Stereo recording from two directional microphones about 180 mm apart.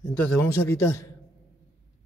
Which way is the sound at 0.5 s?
15° left (ahead or behind).